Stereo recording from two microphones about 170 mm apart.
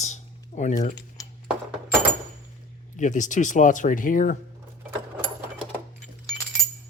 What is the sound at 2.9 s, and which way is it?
Speech, 45° left (ahead or behind).